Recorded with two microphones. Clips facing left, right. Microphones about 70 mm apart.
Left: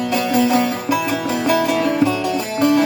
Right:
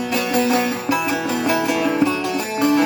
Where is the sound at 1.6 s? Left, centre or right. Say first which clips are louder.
Left 2 dB; centre.